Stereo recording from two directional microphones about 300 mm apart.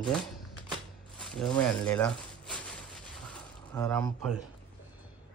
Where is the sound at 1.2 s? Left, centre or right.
Centre.